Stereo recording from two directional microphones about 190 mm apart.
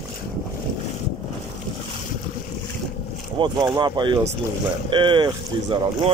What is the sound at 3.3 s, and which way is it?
Speech, 25° right (ahead or behind).